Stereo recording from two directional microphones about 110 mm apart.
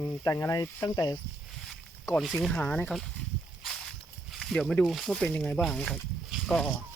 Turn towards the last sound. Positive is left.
turn(degrees=5)  # may be behind; listen again after turning